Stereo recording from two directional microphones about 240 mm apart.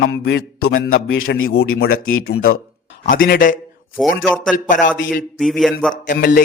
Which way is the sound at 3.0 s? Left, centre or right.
Left.